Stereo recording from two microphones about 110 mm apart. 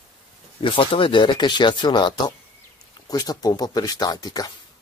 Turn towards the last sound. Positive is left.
turn(degrees=35)  # may be behind; listen again after turning